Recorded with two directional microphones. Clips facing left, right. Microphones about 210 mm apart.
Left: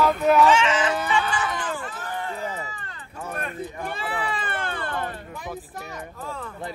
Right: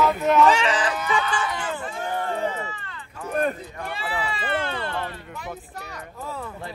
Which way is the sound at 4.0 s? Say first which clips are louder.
Right 1 dB; 50° left (ahead or behind).